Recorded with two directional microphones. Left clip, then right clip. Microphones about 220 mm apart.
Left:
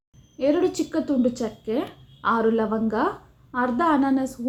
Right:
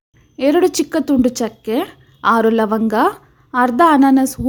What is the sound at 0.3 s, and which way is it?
A woman's voice, 50° right (ahead or behind).